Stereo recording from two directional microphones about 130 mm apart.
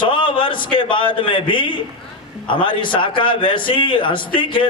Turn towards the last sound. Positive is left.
turn(degrees=40)  # may be behind; listen again after turning